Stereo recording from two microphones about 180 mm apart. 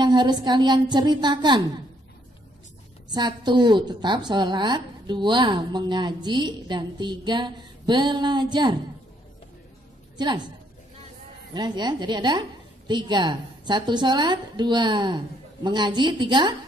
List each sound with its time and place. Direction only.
0.0 s a woman's voice: 25° right (ahead or behind)
3.1 s a woman's voice: 25° right (ahead or behind)
10.1 s a woman's voice: 25° right (ahead or behind)
11.5 s a woman's voice: 25° right (ahead or behind)